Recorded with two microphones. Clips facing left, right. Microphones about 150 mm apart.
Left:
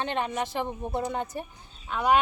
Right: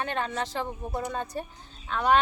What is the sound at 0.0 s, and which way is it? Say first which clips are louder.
Speech: left 1 dB; 20° left (ahead or behind).